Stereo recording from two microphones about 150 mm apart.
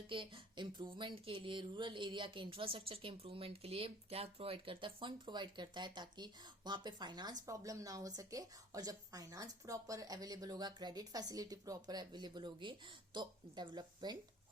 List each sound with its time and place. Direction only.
0.1 s speech: 35° right (ahead or behind)